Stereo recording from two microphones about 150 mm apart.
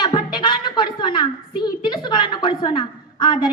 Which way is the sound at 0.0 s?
30° left (ahead or behind).